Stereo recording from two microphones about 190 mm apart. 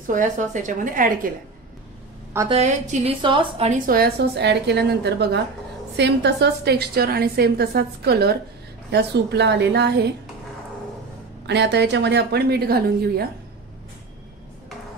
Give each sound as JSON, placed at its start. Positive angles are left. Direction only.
{"t": 0.0, "sound": "a woman's voice", "side_deg": -45}
{"t": 2.5, "sound": "a woman's voice", "side_deg": -35}
{"t": 11.4, "sound": "a woman's voice", "side_deg": -65}